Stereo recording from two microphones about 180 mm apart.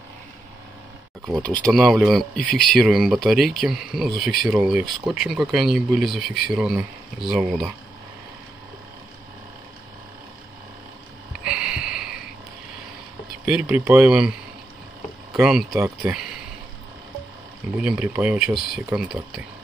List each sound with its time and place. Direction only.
1.4 s speech: 5° left (ahead or behind)
11.4 s a sound: 5° right (ahead or behind)
13.5 s speech: 5° right (ahead or behind)
15.3 s speech: 5° right (ahead or behind)
17.8 s speech: 5° right (ahead or behind)